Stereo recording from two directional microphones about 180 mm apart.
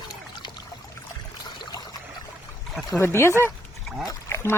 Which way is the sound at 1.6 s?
25° left (ahead or behind).